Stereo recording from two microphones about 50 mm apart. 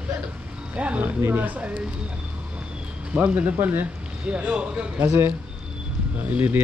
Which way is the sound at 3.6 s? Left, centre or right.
Right.